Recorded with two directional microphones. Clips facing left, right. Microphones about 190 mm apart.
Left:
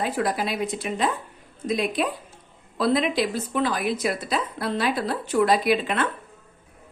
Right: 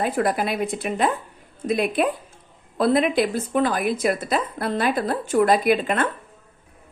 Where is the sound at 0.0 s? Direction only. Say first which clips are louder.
Right 3 dB; 55° right (ahead or behind).